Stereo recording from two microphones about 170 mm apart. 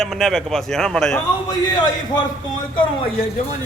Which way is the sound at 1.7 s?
25° left (ahead or behind).